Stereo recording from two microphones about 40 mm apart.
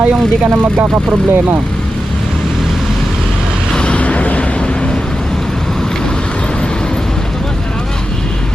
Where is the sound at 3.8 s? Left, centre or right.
Left.